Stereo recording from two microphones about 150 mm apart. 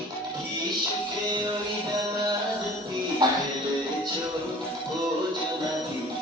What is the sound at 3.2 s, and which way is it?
Music, 25° right (ahead or behind).